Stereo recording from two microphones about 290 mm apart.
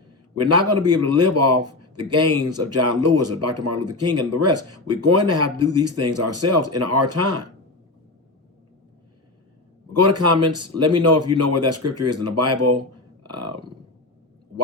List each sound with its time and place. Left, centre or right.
0.3 s speech: right
9.9 s speech: right
13.2 s a sound: right